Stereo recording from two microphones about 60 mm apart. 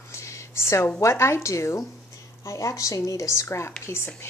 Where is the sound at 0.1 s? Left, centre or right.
Left.